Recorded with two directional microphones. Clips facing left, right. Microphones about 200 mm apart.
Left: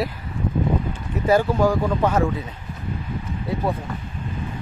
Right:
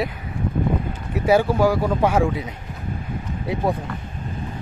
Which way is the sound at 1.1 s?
10° right (ahead or behind).